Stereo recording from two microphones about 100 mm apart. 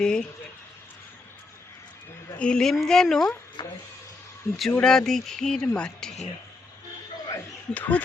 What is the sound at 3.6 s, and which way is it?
Speech, 55° left (ahead or behind).